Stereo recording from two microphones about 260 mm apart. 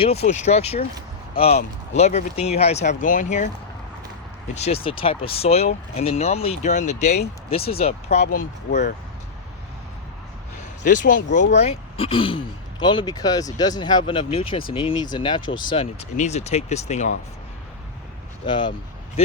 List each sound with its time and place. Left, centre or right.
0.0 s speech: left
4.5 s speech: left
10.8 s speech: left
18.4 s speech: centre